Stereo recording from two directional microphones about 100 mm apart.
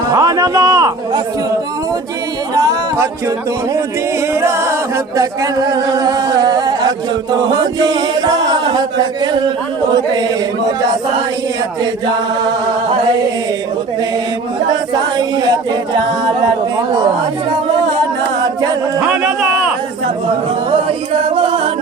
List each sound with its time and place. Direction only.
0.1 s chatter: 35° right (ahead or behind)
2.6 s music: 35° right (ahead or behind)
4.4 s singing: 25° right (ahead or behind); by 9.5 s 45° right (ahead or behind)
9.9 s a capella: 45° right (ahead or behind)
14.9 s a capella: 45° right (ahead or behind)
16.7 s singing: 40° right (ahead or behind)
18.9 s speech: 15° right (ahead or behind)
21.3 s music: 65° right (ahead or behind)